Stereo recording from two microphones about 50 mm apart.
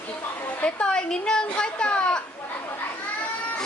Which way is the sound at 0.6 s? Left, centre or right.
Centre.